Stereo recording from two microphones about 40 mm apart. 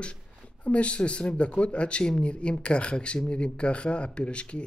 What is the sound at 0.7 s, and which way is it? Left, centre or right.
Speech, left.